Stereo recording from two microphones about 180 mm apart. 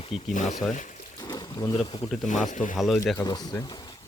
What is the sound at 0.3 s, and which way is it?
Speech, 40° left (ahead or behind).